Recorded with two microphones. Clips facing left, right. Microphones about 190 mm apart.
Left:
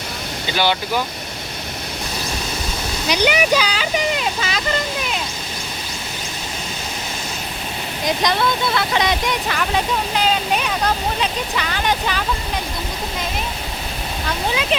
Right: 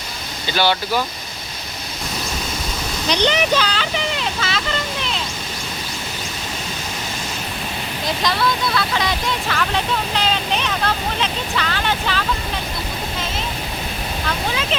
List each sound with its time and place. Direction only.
0.5 s speech: 15° left (ahead or behind)
3.1 s speech: 10° left (ahead or behind)
4.4 s a sound: 15° left (ahead or behind)
8.0 s speech: 20° left (ahead or behind)